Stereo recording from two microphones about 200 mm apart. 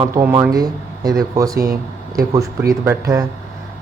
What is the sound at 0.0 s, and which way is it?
Speech, 15° right (ahead or behind).